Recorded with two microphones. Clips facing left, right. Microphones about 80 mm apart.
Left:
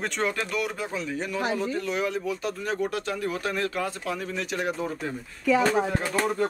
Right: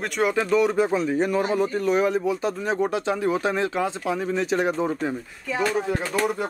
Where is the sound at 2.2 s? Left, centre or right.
Right.